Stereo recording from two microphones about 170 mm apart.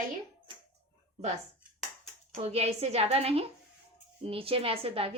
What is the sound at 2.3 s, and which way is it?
Speech, 40° right (ahead or behind).